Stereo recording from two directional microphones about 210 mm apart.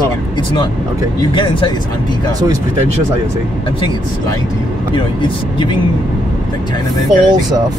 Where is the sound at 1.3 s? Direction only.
25° left (ahead or behind).